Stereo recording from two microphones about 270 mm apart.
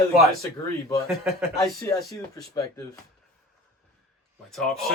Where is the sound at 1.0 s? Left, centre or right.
Centre.